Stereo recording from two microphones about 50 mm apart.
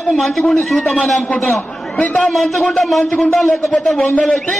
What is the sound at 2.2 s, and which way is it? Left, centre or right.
A man's voice, centre.